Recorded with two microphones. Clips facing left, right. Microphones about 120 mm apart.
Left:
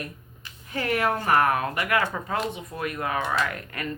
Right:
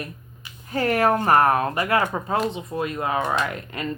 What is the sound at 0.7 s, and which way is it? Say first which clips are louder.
Speech: right 5 dB; 40° right (ahead or behind).